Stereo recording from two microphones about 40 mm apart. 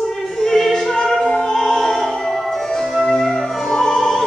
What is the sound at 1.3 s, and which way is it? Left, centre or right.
Opera, left.